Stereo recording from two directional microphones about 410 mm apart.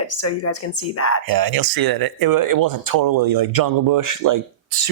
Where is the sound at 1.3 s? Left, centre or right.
Right.